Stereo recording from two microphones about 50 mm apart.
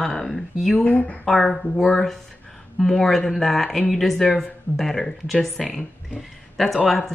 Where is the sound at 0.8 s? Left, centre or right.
Left.